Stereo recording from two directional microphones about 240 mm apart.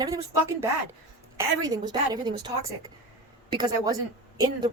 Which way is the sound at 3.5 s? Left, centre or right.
Centre.